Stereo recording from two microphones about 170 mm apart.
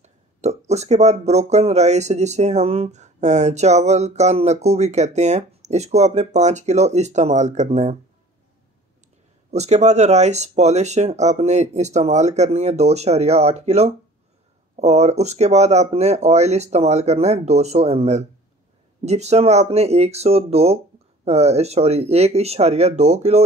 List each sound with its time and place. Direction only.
0.0 s a sound: 40° right (ahead or behind)
0.7 s speech: 40° right (ahead or behind)
9.5 s speech: 40° right (ahead or behind)